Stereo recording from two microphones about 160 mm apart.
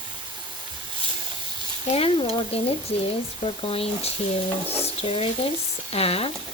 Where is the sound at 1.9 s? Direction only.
40° left (ahead or behind).